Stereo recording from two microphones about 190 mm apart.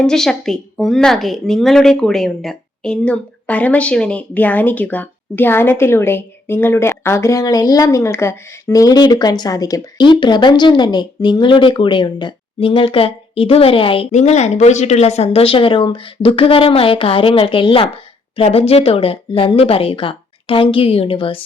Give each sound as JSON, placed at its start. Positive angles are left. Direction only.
{"t": 0.0, "sound": "a woman's voice", "side_deg": 5}